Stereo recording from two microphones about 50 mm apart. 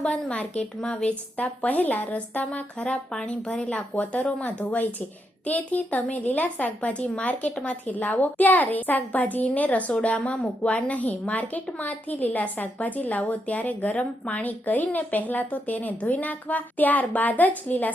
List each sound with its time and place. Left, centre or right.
0.0 s a woman's voice: left